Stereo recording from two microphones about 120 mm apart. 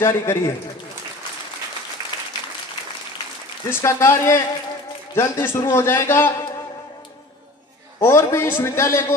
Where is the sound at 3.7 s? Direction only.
20° left (ahead or behind).